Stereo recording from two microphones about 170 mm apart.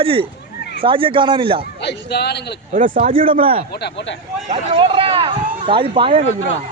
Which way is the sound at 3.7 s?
80° left.